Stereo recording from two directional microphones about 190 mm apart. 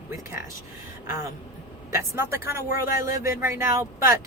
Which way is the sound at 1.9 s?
15° right (ahead or behind).